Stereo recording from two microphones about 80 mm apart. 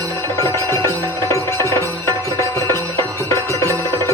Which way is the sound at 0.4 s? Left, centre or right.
Left.